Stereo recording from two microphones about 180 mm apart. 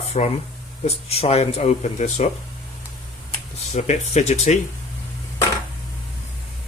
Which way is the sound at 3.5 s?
40° left (ahead or behind).